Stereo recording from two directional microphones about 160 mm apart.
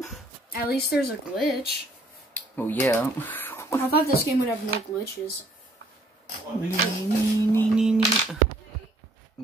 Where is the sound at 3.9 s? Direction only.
70° left (ahead or behind).